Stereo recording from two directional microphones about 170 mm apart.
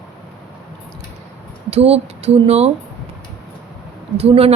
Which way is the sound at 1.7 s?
35° right (ahead or behind).